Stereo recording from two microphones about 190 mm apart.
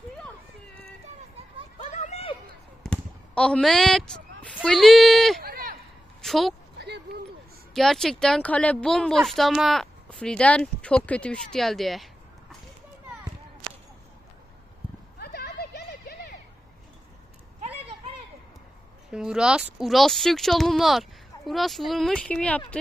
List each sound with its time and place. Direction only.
1.8 s run: 35° left (ahead or behind)
2.8 s speech: 5° left (ahead or behind)
5.4 s run: 50° right (ahead or behind)
6.2 s a woman's voice: centre (ahead or behind)
6.7 s a sound: 60° right (ahead or behind)
7.7 s speech: centre (ahead or behind)
15.2 s a sound: 60° left (ahead or behind)
19.1 s speech: 5° right (ahead or behind)